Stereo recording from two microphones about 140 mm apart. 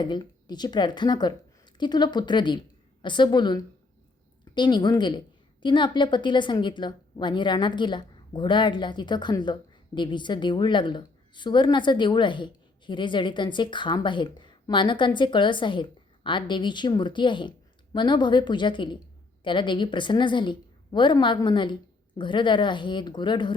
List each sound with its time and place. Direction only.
0.0 s a woman's voice: 30° left (ahead or behind)